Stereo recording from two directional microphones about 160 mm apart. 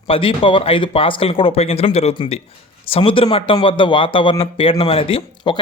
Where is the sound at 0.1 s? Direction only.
35° left (ahead or behind).